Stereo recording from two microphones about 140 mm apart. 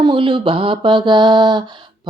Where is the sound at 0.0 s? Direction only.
35° right (ahead or behind).